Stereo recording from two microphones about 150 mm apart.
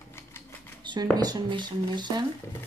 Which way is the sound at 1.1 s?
25° right (ahead or behind).